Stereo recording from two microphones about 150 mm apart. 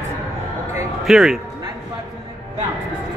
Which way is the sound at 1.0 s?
Centre (ahead or behind).